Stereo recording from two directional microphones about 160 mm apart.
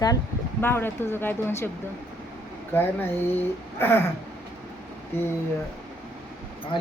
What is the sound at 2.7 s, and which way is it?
Speech, 10° left (ahead or behind).